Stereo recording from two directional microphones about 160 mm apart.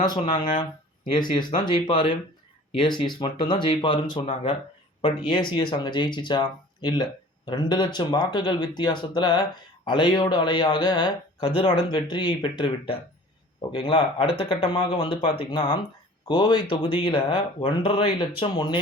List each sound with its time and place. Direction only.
0.0 s speech: 25° left (ahead or behind)